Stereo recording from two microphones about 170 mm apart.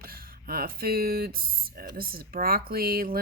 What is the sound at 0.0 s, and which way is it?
Speech, 60° right (ahead or behind).